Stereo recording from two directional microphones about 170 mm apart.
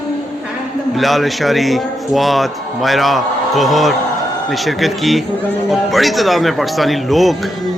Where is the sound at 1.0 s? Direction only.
Centre (ahead or behind).